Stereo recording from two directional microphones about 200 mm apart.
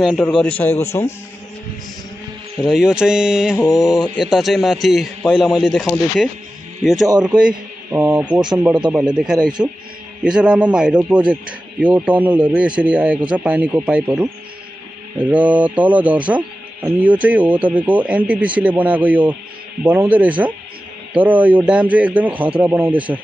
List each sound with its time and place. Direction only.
0.0 s a man's voice: centre (ahead or behind)
2.6 s speech: centre (ahead or behind)
3.5 s a man's voice: 15° left (ahead or behind)
4.2 s a man's voice: centre (ahead or behind)
8.7 s a man's voice: 20° right (ahead or behind)
9.1 s speech: 5° right (ahead or behind)